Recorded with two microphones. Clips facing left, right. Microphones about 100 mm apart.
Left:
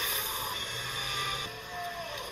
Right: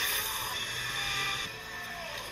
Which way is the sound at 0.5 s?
45° left (ahead or behind).